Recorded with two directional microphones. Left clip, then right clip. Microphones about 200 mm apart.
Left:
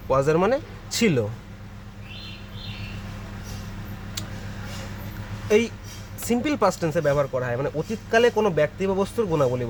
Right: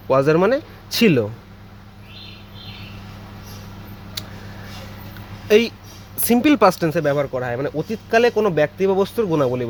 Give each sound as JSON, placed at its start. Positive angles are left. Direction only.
{"t": 0.1, "sound": "speech", "side_deg": -25}
{"t": 5.5, "sound": "speech", "side_deg": -35}